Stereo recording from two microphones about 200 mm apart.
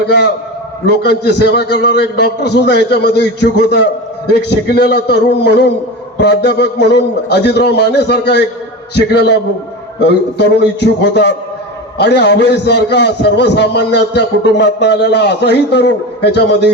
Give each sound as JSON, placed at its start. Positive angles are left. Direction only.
{"t": 0.9, "sound": "a man's voice", "side_deg": 55}